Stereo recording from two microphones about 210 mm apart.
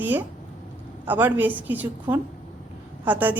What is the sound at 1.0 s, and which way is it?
A woman's voice, 10° right (ahead or behind).